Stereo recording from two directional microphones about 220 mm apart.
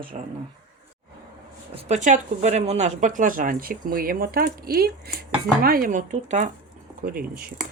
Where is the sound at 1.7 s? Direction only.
30° right (ahead or behind).